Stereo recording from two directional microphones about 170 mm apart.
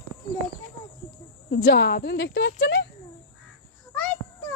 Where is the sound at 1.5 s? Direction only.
80° left.